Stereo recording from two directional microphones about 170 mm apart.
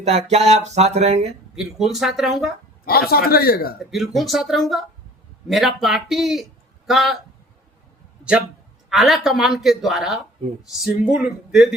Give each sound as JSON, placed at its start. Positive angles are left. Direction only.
{"t": 0.0, "sound": "a sound", "side_deg": -40}
{"t": 1.5, "sound": "speech", "side_deg": 0}
{"t": 2.8, "sound": "a man's voice", "side_deg": 65}
{"t": 3.9, "sound": "speech", "side_deg": 0}
{"t": 8.2, "sound": "speech", "side_deg": -5}